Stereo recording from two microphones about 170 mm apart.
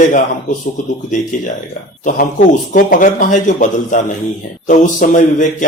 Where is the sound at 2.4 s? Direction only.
50° left (ahead or behind).